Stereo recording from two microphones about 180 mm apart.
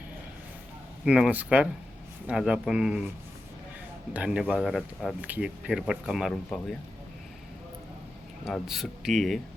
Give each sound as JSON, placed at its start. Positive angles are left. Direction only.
{"t": 1.0, "sound": "speech", "side_deg": -5}
{"t": 4.1, "sound": "speech", "side_deg": -5}
{"t": 8.4, "sound": "speech", "side_deg": 0}